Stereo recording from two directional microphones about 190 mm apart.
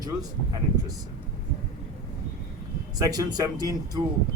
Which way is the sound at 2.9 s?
20° right (ahead or behind).